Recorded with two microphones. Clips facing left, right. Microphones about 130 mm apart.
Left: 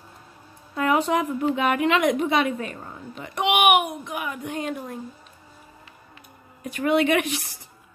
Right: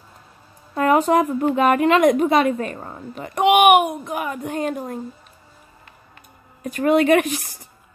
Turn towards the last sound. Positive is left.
turn(degrees=-45)  # may be behind; listen again after turning